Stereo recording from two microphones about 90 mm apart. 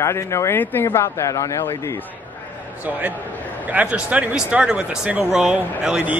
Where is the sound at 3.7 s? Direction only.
15° right (ahead or behind).